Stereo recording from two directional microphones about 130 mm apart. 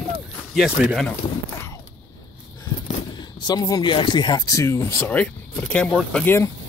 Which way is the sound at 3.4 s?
30° left (ahead or behind).